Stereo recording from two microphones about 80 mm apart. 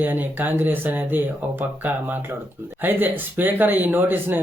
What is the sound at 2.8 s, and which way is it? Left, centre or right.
Speech, right.